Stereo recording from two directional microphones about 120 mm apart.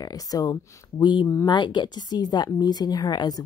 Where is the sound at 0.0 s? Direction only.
30° left (ahead or behind).